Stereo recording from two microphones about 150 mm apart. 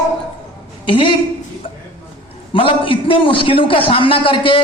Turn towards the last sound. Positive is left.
turn(degrees=35)  # may be behind; listen again after turning